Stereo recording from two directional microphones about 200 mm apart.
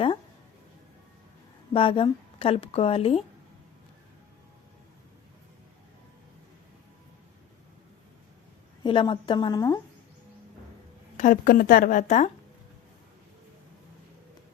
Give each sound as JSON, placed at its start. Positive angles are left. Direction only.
{"t": 1.7, "sound": "a woman's voice", "side_deg": 25}
{"t": 8.8, "sound": "a woman's voice", "side_deg": 25}
{"t": 11.2, "sound": "speech", "side_deg": 40}